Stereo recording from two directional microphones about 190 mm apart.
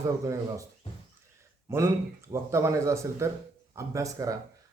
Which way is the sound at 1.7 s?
15° right (ahead or behind).